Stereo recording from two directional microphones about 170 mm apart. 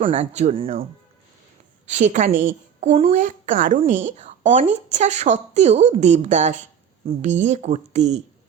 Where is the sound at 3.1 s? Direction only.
50° right (ahead or behind).